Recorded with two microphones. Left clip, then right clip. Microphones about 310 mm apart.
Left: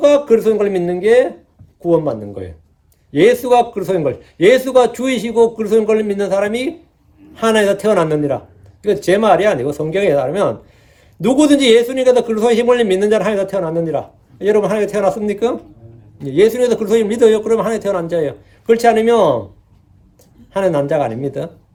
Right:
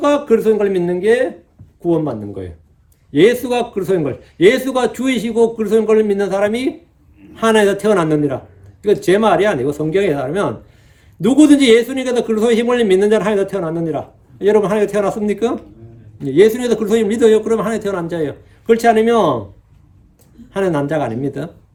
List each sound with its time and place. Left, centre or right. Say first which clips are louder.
0.0 s a man's voice: left 3 dB; centre
20.5 s a man's voice: left 2 dB; centre